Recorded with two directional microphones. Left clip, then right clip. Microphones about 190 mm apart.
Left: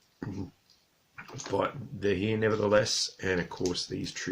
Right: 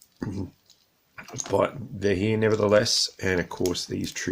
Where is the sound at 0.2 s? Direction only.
35° right (ahead or behind).